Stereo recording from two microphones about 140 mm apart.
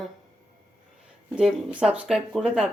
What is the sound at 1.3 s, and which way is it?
Speech, 5° right (ahead or behind).